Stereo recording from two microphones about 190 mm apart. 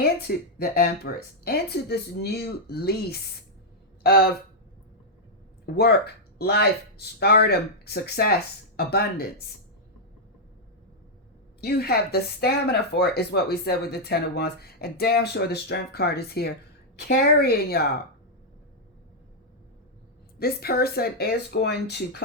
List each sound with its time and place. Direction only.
0.0 s speech: 55° left (ahead or behind)
5.6 s speech: 55° left (ahead or behind)
11.6 s speech: 55° left (ahead or behind)
20.4 s speech: 55° left (ahead or behind)